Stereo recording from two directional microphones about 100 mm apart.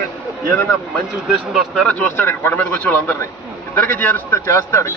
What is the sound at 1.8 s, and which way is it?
A man's voice, 15° left (ahead or behind).